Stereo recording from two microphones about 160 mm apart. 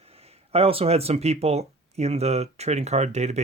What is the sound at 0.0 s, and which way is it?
Speech, 40° right (ahead or behind).